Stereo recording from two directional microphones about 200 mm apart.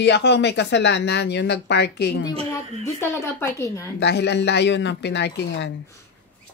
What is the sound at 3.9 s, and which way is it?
Speech, 55° left (ahead or behind).